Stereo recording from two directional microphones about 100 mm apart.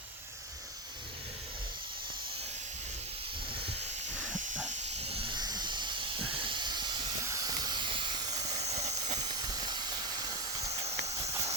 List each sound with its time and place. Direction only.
4.8 s hiss: 90° right
5.3 s hiss: 45° right (ahead or behind)
7.3 s hiss: 30° right (ahead or behind)
8.6 s steam: 90° right
9.2 s hiss: 40° right (ahead or behind)
11.0 s horse: 30° right (ahead or behind)